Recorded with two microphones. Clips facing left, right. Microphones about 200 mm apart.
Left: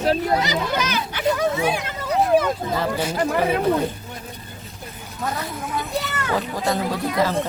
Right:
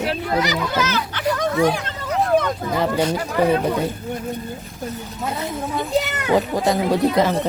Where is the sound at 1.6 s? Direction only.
15° left (ahead or behind).